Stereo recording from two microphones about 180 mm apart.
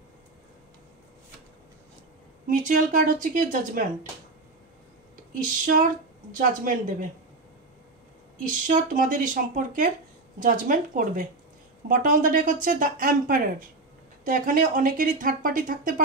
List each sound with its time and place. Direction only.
2.5 s speech: 45° right (ahead or behind)
5.4 s speech: 45° right (ahead or behind)
8.5 s speech: 45° right (ahead or behind)